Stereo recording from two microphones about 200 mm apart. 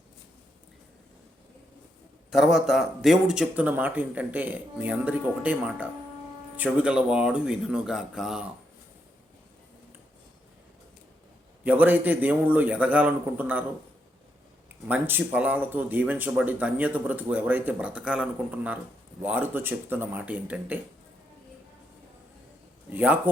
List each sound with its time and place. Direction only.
2.3 s speech: centre (ahead or behind)
11.6 s speech: 10° right (ahead or behind)
14.8 s speech: 10° right (ahead or behind)
22.9 s speech: 10° right (ahead or behind)